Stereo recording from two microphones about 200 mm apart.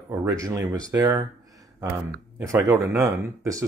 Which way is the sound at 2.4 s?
10° right (ahead or behind).